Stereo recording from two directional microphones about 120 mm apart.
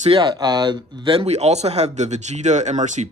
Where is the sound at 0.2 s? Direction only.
35° right (ahead or behind).